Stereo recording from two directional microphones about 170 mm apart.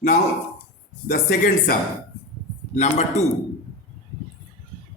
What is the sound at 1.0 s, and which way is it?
Speech, 65° left (ahead or behind).